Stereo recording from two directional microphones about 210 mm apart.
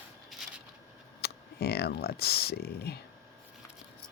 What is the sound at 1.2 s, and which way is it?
Speech, 50° left (ahead or behind).